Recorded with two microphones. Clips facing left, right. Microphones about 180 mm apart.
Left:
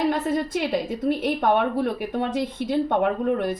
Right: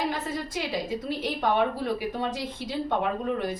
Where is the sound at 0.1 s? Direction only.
55° left (ahead or behind).